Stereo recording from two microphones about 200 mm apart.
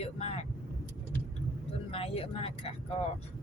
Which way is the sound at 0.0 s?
30° left (ahead or behind).